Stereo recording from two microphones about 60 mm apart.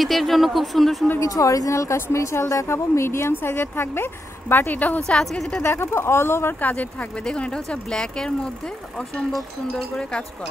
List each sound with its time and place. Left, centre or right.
0.0 s speech: centre
1.2 s speech: left
5.2 s speech: centre
5.7 s speech: left
6.6 s speech: left
7.2 s speech: centre
9.7 s speech: centre